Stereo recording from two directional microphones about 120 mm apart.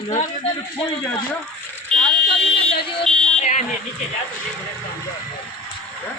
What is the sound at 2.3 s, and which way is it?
Speech, 50° left (ahead or behind).